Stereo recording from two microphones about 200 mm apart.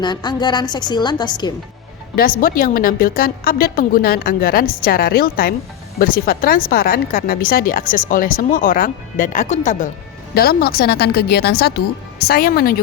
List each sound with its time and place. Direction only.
0.0 s a woman's voice: 20° left (ahead or behind)
2.1 s speech: 45° left (ahead or behind)
10.3 s speech: 50° left (ahead or behind)